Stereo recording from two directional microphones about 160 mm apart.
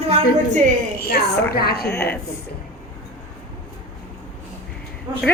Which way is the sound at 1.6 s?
75° left (ahead or behind).